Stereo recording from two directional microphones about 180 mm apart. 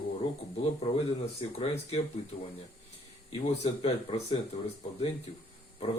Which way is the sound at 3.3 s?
30° left (ahead or behind).